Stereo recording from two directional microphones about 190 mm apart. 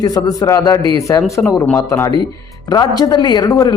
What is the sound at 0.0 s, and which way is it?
Speech, 20° left (ahead or behind).